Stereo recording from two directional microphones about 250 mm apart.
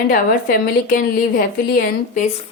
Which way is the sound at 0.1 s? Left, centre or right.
Left.